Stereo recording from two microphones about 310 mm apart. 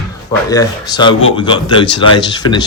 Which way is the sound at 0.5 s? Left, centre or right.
Centre.